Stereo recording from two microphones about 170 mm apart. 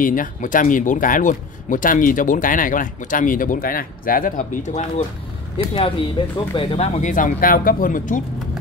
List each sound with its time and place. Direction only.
0.0 s speech: 50° left (ahead or behind)
5.8 s speech: 30° left (ahead or behind)
7.0 s speech: 50° left (ahead or behind)